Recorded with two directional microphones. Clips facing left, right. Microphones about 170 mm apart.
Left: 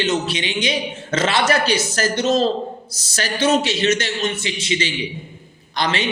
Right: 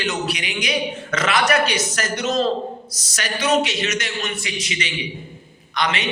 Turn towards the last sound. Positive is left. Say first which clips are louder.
# left 1 dB
turn(degrees=30)  # may be behind; listen again after turning